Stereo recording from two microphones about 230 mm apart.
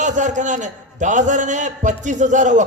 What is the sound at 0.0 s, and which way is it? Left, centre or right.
A man's voice, right.